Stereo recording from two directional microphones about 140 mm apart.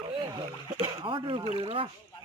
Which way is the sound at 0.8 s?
40° right (ahead or behind).